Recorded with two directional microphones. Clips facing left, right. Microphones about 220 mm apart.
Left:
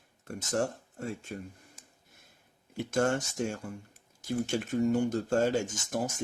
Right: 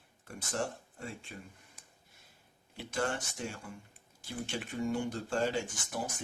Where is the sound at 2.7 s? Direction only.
45° left (ahead or behind).